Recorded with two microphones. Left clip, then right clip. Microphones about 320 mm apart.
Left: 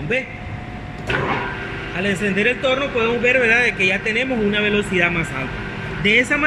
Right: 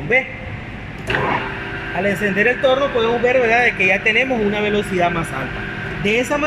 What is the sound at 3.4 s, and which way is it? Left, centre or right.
Speech, centre.